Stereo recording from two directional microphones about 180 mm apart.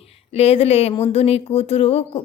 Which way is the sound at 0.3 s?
35° left (ahead or behind).